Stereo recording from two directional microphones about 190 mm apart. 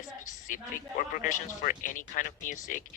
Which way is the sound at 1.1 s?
45° left (ahead or behind).